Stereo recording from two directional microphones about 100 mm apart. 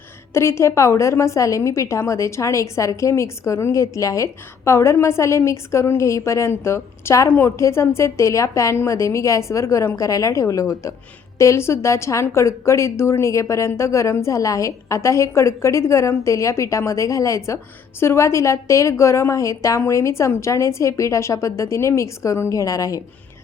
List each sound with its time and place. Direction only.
0.3 s a woman's voice: 30° left (ahead or behind)